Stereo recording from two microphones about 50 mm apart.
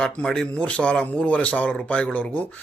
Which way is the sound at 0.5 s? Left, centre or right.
Left.